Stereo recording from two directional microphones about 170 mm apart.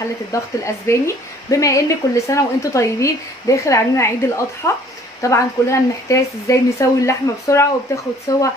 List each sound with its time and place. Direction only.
0.3 s a woman's voice: 15° left (ahead or behind)